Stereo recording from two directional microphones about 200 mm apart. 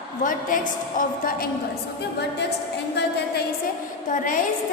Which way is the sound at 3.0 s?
55° left (ahead or behind).